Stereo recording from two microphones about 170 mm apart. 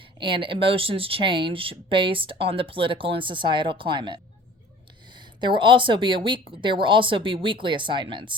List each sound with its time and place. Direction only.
0.2 s speech: 30° right (ahead or behind)